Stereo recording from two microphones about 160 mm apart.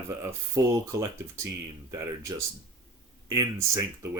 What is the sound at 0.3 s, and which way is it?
Speech, 20° right (ahead or behind).